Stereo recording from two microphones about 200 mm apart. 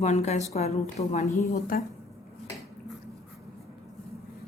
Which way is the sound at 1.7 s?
50° left (ahead or behind).